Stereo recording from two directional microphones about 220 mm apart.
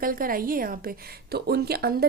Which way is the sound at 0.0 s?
40° right (ahead or behind).